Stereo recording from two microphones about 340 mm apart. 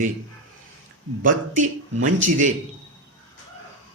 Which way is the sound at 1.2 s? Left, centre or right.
Right.